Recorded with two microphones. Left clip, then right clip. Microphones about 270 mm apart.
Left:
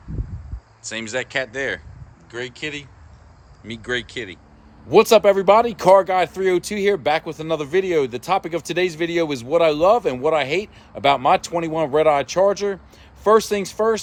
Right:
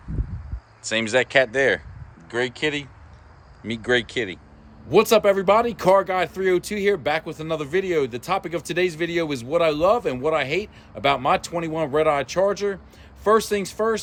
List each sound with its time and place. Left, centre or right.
0.8 s speech: centre